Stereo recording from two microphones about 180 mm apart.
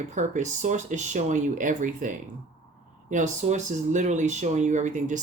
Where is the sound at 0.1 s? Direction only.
40° right (ahead or behind).